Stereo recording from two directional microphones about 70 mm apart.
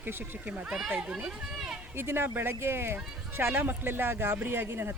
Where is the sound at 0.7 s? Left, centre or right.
Centre.